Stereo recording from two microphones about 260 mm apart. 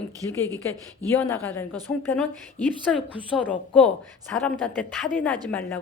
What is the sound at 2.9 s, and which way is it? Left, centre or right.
A woman's voice, centre.